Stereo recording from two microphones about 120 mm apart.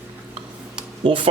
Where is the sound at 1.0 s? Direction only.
50° right (ahead or behind).